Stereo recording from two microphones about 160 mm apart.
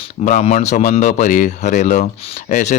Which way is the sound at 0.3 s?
45° left (ahead or behind).